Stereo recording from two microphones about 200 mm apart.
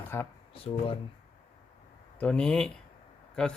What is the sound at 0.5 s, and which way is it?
Speech, 25° left (ahead or behind).